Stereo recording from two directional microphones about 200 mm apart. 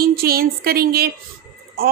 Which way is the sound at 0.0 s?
50° right (ahead or behind).